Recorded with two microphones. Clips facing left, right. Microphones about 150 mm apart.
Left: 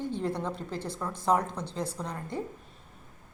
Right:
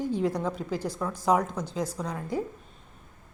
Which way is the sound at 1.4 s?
30° left (ahead or behind).